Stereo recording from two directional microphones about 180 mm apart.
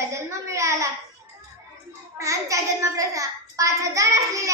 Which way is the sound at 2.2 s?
15° right (ahead or behind).